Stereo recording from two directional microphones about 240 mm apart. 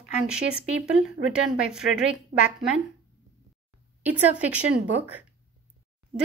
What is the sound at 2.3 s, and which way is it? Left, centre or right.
Speech, right.